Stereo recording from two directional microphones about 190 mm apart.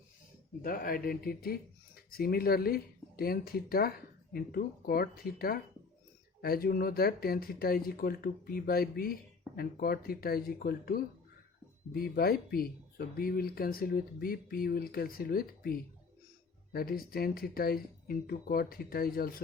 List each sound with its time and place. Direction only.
0.6 s speech: 50° left (ahead or behind)